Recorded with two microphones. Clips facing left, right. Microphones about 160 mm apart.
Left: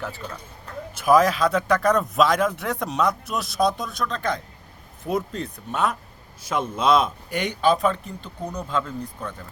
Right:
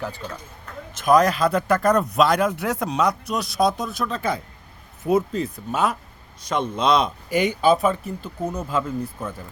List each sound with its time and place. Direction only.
0.0 s speech: centre (ahead or behind)